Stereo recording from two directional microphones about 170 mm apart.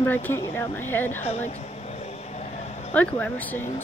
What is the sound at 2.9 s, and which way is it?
Speech, 10° left (ahead or behind).